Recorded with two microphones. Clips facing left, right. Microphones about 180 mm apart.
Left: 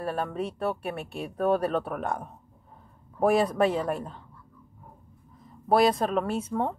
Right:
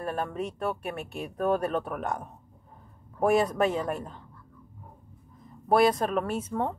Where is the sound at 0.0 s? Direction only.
30° left (ahead or behind).